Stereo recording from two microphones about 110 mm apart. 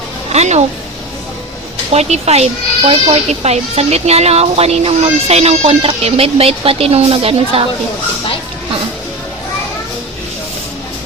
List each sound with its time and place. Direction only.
0.3 s speech: 90° right
1.9 s speech: 85° right; by 7.7 s 60° right (ahead or behind)